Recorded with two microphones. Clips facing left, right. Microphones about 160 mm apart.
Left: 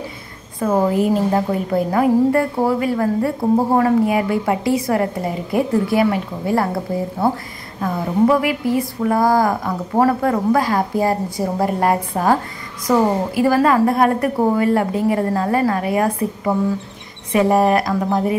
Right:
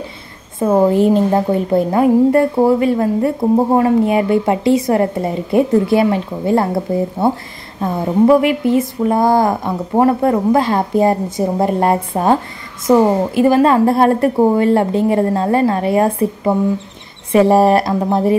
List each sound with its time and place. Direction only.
0.6 s speech: 25° right (ahead or behind)